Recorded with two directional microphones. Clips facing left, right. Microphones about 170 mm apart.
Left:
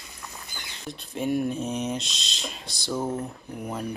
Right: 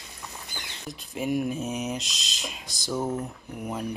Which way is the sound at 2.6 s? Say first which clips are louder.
Left 2 dB; 45° right (ahead or behind).